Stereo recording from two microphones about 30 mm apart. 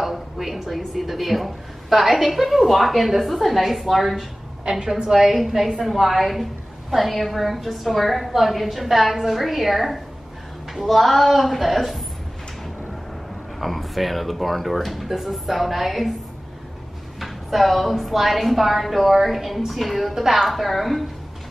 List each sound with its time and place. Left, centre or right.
0.0 s speech: centre
4.6 s a woman's voice: right
5.3 s a woman's voice: centre
13.6 s speech: centre
17.2 s speech: centre